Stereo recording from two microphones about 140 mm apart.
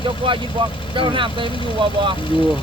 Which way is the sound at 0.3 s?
35° right (ahead or behind).